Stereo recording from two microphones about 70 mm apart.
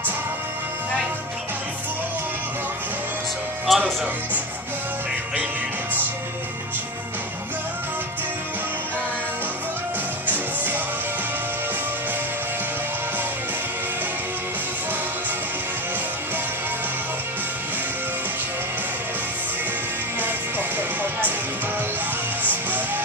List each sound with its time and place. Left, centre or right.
3.7 s music: centre
10.2 s music: right
20.2 s music: right
22.4 s music: right